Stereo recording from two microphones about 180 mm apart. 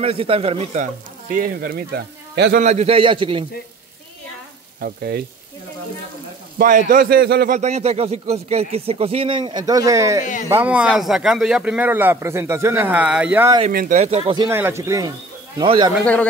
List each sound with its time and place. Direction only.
0.0 s speech: 30° right (ahead or behind)
1.3 s a man's voice: 50° right (ahead or behind)
2.6 s a man's voice: 40° right (ahead or behind)
4.7 s a man's voice: 55° right (ahead or behind)
6.6 s a man's voice: 50° right (ahead or behind)
7.5 s speech: 40° right (ahead or behind); by 13.5 s 10° right (ahead or behind)
13.7 s speech: 50° right (ahead or behind); by 14.5 s 30° right (ahead or behind)
14.5 s speech: 15° right (ahead or behind)
15.6 s a man's voice: 30° right (ahead or behind)